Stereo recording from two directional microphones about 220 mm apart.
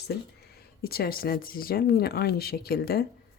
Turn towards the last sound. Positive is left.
turn(degrees=45)  # may be behind; listen again after turning